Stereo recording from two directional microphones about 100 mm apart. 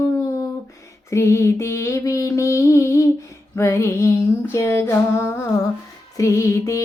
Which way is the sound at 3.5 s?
25° left (ahead or behind).